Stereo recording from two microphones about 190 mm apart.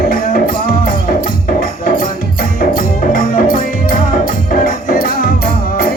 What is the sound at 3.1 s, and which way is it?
Music, 50° left (ahead or behind).